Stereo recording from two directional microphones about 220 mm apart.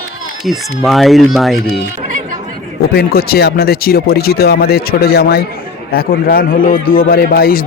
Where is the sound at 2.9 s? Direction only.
45° left (ahead or behind).